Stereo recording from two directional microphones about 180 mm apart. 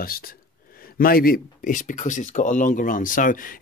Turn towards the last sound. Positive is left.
turn(degrees=50)  # may be behind; listen again after turning